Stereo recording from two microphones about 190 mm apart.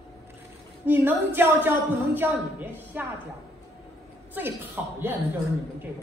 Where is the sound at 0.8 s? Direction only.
10° right (ahead or behind).